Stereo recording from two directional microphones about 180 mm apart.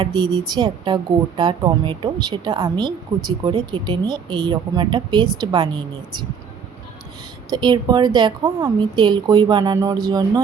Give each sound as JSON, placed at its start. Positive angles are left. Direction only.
{"t": 0.0, "sound": "a woman's voice", "side_deg": -25}
{"t": 7.5, "sound": "a woman's voice", "side_deg": -25}